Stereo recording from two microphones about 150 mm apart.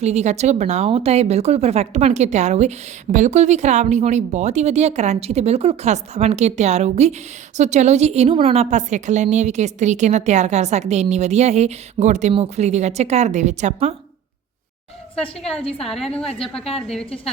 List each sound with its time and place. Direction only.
0.0 s speech: 50° right (ahead or behind)
15.2 s a woman's voice: 10° left (ahead or behind)
16.0 s a woman's voice: 40° left (ahead or behind)